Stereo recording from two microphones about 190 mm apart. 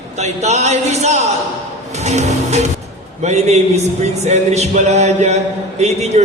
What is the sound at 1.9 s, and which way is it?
Music, 35° right (ahead or behind).